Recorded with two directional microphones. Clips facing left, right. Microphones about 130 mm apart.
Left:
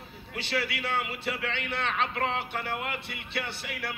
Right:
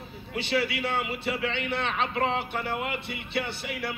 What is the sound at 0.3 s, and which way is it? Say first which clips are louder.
A man's voice: right 4 dB; 20° right (ahead or behind).